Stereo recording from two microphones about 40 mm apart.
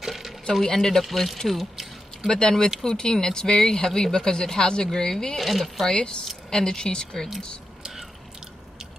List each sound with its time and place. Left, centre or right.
0.0 s a sound: centre
0.7 s speech: centre
2.2 s speech: centre
5.4 s speech: centre
5.9 s speech: centre